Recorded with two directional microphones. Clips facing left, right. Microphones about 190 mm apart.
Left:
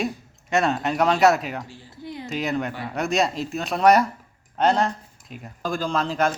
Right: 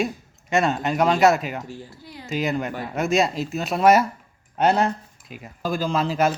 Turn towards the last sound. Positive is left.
turn(degrees=-5)  # may be behind; listen again after turning